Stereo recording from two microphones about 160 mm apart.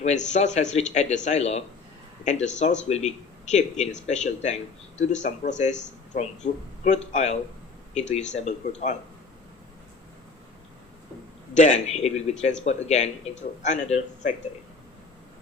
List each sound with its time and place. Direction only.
0.0 s speech: 45° left (ahead or behind)
11.5 s speech: 50° left (ahead or behind)